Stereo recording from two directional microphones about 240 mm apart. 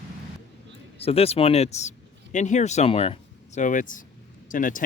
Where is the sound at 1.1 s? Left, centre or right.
Left.